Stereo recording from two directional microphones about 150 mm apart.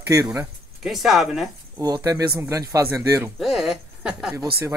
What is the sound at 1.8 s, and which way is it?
Speech, 25° right (ahead or behind).